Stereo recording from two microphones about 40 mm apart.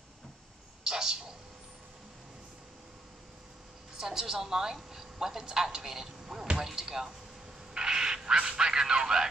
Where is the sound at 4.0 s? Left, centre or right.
Centre.